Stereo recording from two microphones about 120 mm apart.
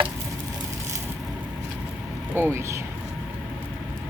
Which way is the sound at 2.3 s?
20° right (ahead or behind).